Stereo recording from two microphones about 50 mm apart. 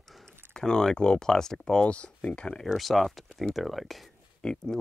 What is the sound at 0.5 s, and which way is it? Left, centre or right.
Speech, centre.